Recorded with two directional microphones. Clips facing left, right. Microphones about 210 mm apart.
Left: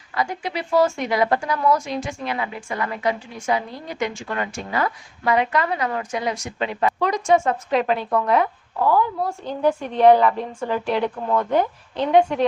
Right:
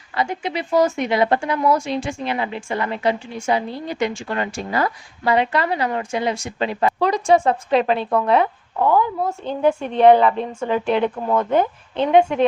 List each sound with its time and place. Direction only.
0.1 s a woman's voice: 25° right (ahead or behind)